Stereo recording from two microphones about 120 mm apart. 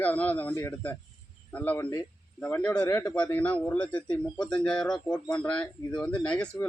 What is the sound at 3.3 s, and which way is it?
Speech, 10° left (ahead or behind).